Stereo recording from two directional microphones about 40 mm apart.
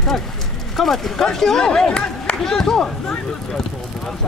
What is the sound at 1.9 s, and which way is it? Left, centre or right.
Speech, left.